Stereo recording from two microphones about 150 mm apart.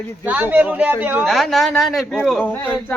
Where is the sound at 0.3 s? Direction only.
10° right (ahead or behind).